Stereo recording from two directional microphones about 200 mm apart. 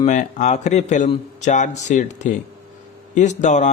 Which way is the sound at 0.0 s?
35° left (ahead or behind).